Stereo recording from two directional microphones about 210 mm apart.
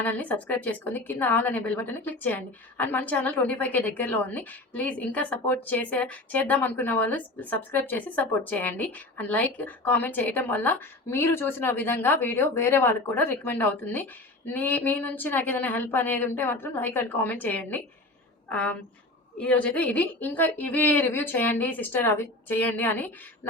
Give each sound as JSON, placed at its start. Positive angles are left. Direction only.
{"t": 0.0, "sound": "a woman's voice", "side_deg": 10}